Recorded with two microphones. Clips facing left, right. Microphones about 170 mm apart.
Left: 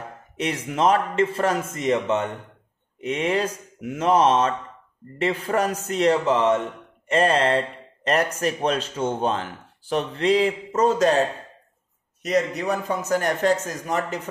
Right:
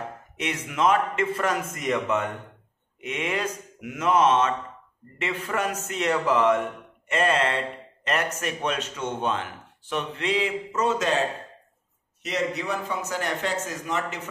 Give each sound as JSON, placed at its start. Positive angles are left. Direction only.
{"t": 0.4, "sound": "a man's voice", "side_deg": 30}